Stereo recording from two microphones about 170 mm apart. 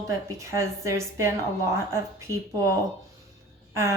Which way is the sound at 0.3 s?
15° right (ahead or behind).